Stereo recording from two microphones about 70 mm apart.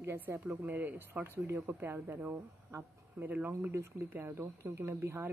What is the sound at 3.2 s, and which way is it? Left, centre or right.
Speech, right.